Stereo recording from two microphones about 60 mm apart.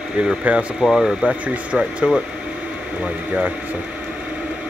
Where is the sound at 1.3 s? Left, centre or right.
Centre.